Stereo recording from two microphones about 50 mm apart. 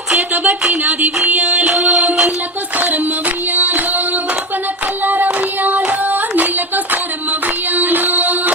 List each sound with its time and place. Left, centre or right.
0.1 s a sound: centre
1.5 s music: centre
2.7 s music: right
5.0 s child singing: right
7.8 s music: right